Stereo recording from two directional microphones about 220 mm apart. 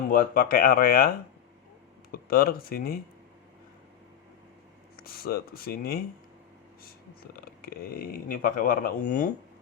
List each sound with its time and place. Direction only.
0.1 s speech: 40° left (ahead or behind)
2.1 s speech: 40° left (ahead or behind)
4.9 s speech: 45° left (ahead or behind)